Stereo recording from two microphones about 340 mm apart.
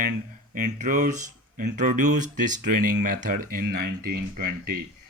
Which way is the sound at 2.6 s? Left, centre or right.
Right.